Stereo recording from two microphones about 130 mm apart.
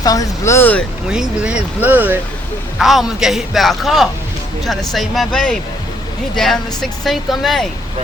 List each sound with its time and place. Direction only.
0.0 s speech: 25° left (ahead or behind)
1.1 s speech: 5° right (ahead or behind)
2.7 s a man's voice: centre (ahead or behind)